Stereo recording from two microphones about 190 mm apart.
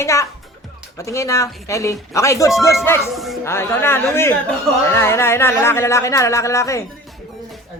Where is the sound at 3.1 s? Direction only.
Centre (ahead or behind).